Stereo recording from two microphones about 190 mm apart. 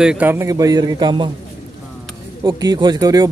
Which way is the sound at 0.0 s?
5° right (ahead or behind).